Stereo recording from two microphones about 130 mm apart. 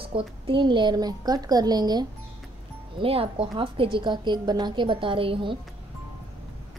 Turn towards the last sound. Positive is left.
turn(degrees=-40)  # may be behind; listen again after turning